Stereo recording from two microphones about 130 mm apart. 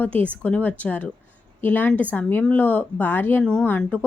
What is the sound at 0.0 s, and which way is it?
Speech, 10° left (ahead or behind).